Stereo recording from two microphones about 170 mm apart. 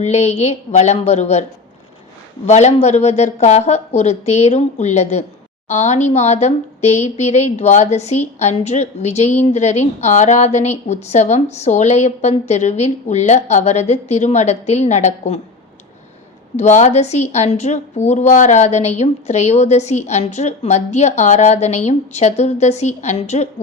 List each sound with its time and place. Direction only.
0.0 s a woman's voice: 40° left (ahead or behind)
2.5 s a woman's voice: 40° left (ahead or behind)
16.6 s a woman's voice: 45° left (ahead or behind)